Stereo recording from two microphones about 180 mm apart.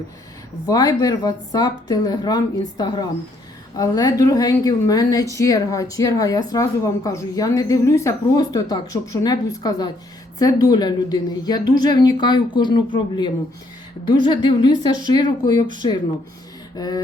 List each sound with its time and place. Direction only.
0.7 s speech: 20° left (ahead or behind)